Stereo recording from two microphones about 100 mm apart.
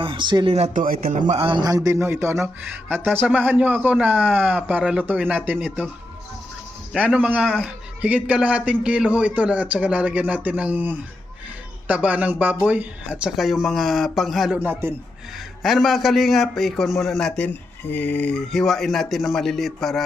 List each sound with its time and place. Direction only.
0.0 s speech: 55° right (ahead or behind)
1.3 s a man's voice: 65° right (ahead or behind)
1.6 s a man's voice: 35° right (ahead or behind)
2.2 s a man's voice: 25° right (ahead or behind)
6.9 s a man's voice: 10° right (ahead or behind)
14.6 s a man's voice: 20° right (ahead or behind)
15.6 s a man's voice: centre (ahead or behind)